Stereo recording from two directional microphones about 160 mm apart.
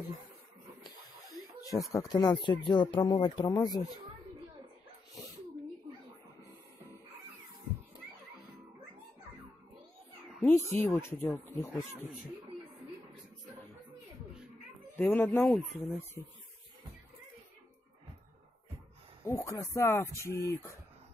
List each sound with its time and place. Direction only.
1.9 s speech: 20° left (ahead or behind)
10.4 s speech: 15° left (ahead or behind)
15.0 s speech: 10° left (ahead or behind)
19.2 s speech: 15° left (ahead or behind)